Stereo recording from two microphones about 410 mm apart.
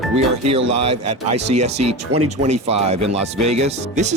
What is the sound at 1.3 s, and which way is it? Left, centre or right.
Speech, centre.